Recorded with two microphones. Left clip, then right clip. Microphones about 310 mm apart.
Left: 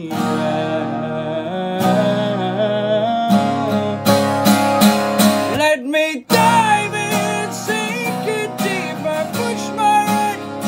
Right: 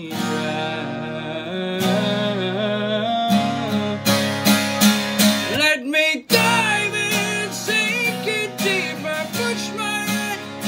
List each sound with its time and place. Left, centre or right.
2.0 s music: centre
3.3 s music: left
5.6 s music: centre
9.8 s music: centre